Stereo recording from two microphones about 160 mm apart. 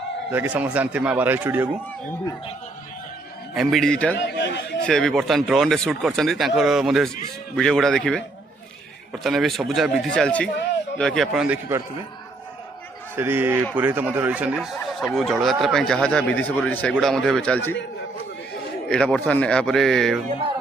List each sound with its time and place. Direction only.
0.3 s speech: 10° right (ahead or behind)
3.5 s speech: centre (ahead or behind)
4.3 s a man's voice: 90° left
4.8 s speech: 5° left (ahead or behind)
9.2 s speech: centre (ahead or behind)
13.1 s speech: 10° right (ahead or behind); by 17.7 s 10° left (ahead or behind)
18.9 s speech: 5° left (ahead or behind)